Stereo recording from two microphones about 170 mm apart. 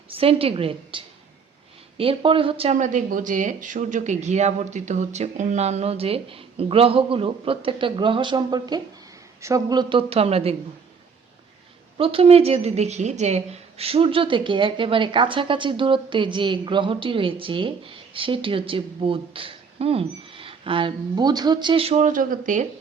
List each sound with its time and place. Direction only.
0.1 s a woman's voice: 35° right (ahead or behind)
11.9 s a woman's voice: 35° right (ahead or behind); by 22.6 s 50° right (ahead or behind)